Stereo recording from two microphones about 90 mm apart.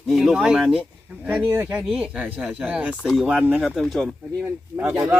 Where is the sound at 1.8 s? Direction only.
5° right (ahead or behind).